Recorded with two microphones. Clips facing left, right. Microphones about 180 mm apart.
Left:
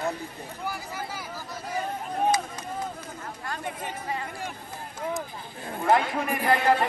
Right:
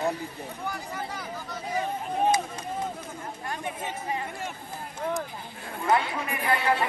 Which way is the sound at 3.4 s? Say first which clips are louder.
Even; 20° right (ahead or behind).